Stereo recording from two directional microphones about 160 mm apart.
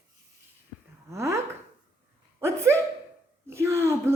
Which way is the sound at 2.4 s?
15° right (ahead or behind).